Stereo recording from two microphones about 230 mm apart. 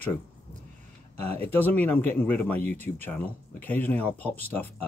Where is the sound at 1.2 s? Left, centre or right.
Right.